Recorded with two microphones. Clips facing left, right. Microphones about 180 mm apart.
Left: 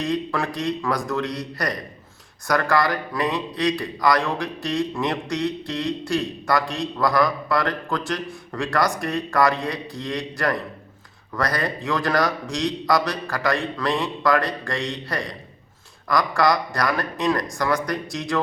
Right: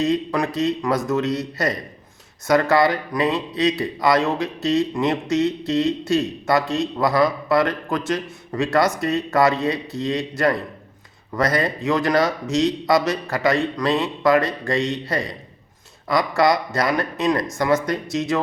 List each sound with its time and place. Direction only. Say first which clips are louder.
0.0 s speech: right 4 dB; 20° right (ahead or behind)